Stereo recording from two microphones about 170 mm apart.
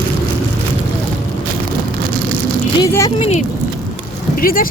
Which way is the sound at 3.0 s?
35° left (ahead or behind).